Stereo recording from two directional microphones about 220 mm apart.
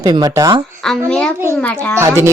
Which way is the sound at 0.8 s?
Centre (ahead or behind).